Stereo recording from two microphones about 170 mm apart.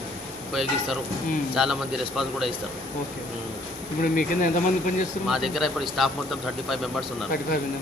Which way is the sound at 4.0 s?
55° left (ahead or behind).